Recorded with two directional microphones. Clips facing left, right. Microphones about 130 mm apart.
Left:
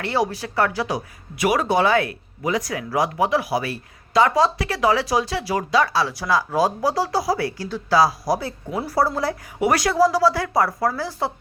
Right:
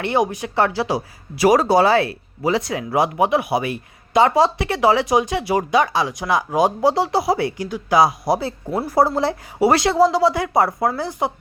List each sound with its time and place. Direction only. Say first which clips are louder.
0.0 s speech: right 3 dB; 20° right (ahead or behind)